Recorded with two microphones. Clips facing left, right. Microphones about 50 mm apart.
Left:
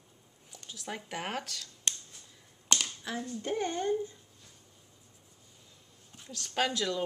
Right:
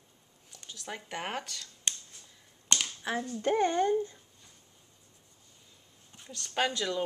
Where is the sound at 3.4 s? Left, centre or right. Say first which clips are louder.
Right 7 dB; right.